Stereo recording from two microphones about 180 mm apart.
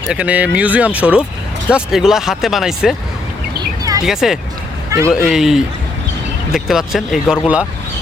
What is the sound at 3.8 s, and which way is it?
Bird, 20° right (ahead or behind).